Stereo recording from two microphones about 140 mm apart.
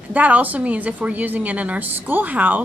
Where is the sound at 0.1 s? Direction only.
10° right (ahead or behind).